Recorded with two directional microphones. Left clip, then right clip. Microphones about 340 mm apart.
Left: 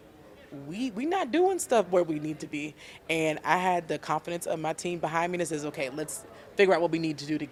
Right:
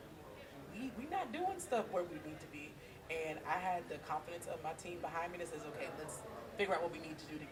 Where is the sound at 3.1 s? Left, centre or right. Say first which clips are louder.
Left 14 dB; left.